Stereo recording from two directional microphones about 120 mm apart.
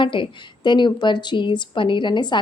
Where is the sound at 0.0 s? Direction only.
45° left (ahead or behind).